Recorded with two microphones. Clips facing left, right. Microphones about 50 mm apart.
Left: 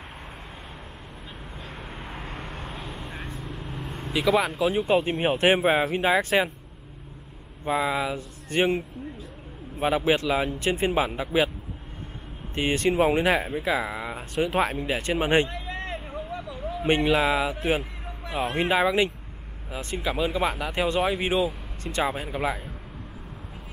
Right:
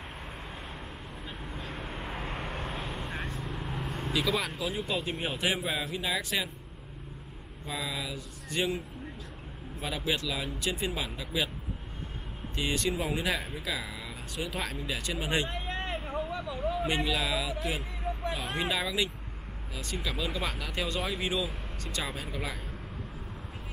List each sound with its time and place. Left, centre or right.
1.6 s vehicle: centre
4.1 s speech: centre
4.7 s speech: left
7.6 s speech: left
12.5 s speech: left
15.4 s a sound: right
16.8 s speech: left